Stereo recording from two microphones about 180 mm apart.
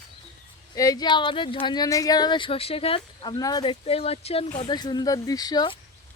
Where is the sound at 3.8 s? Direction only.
35° left (ahead or behind).